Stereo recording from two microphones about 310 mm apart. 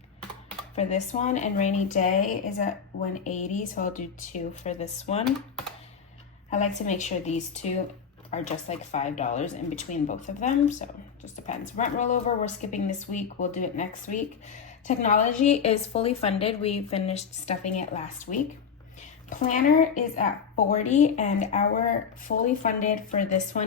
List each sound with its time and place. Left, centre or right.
0.8 s a woman's voice: left
6.5 s a woman's voice: left